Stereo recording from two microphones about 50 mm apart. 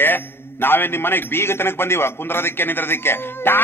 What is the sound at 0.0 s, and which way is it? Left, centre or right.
A man's voice, left.